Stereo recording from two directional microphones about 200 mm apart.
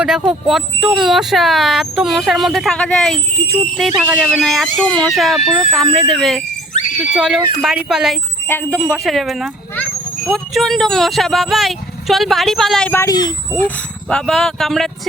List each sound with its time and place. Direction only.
0.0 s speech: 5° right (ahead or behind)
6.7 s screaming: 40° left (ahead or behind)
7.2 s speech: centre (ahead or behind)
8.4 s speech: 10° left (ahead or behind)
13.5 s speech: 5° left (ahead or behind)